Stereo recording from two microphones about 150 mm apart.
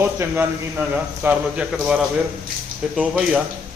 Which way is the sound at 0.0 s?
15° right (ahead or behind).